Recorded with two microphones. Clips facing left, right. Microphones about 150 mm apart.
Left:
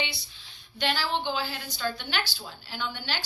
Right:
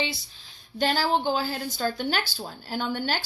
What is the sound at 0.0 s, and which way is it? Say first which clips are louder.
Speech: right 4 dB; 40° right (ahead or behind).